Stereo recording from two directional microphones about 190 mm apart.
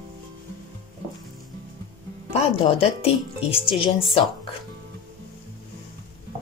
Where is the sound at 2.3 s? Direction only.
30° left (ahead or behind).